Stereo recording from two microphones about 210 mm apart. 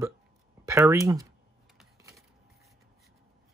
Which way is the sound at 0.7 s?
15° right (ahead or behind).